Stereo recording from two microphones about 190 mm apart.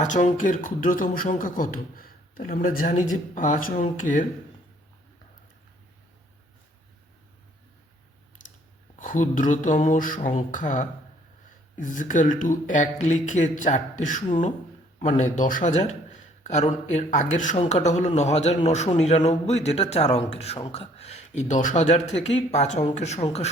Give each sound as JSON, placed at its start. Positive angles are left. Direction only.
{"t": 0.0, "sound": "speech", "side_deg": 40}
{"t": 8.4, "sound": "chewing", "side_deg": 45}
{"t": 9.0, "sound": "a man's voice", "side_deg": 45}